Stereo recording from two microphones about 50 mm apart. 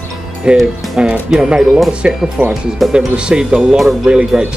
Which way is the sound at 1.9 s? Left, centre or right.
Centre.